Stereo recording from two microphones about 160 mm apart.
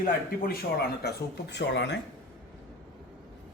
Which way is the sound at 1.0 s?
90° left.